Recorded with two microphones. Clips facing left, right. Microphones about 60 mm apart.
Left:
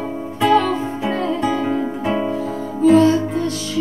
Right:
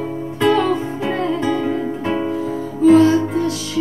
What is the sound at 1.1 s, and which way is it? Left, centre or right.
Music, centre.